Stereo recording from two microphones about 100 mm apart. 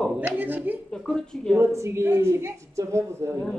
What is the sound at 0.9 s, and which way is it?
Speech, 5° left (ahead or behind).